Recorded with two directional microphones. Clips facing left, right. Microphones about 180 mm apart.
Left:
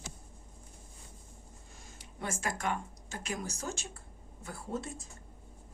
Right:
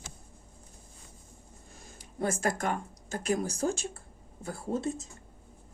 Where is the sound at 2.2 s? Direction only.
40° right (ahead or behind).